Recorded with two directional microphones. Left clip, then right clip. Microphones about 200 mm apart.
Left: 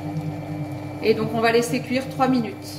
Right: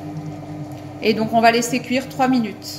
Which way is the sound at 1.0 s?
45° right (ahead or behind).